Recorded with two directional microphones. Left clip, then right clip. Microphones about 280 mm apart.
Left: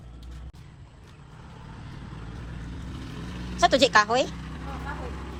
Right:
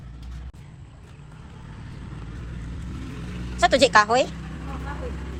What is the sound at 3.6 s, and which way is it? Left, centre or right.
Speech, centre.